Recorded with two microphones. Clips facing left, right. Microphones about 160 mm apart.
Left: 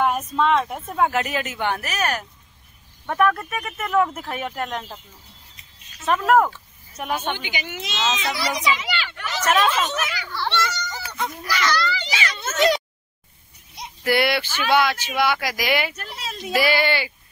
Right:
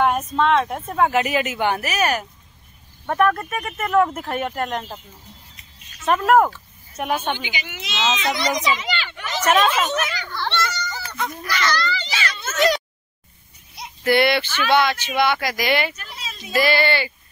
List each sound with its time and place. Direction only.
0.0 s speech: 5° left (ahead or behind)
6.0 s speech: 5° right (ahead or behind)
7.5 s a woman's voice: 50° left (ahead or behind)
8.7 s speech: 10° left (ahead or behind)
9.4 s speech: centre (ahead or behind)
9.9 s a sound: 5° left (ahead or behind)
11.4 s speech: 10° left (ahead or behind); by 12.8 s 25° left (ahead or behind)
13.7 s speech: 5° left (ahead or behind)
16.0 s a sound: 65° left (ahead or behind)
16.5 s speech: 10° left (ahead or behind)